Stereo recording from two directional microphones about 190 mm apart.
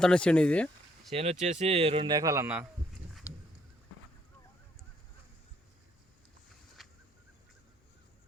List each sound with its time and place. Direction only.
0.0 s speech: 5° left (ahead or behind)
1.1 s speech: 35° right (ahead or behind); by 2.6 s 10° right (ahead or behind)
6.8 s a sound: centre (ahead or behind)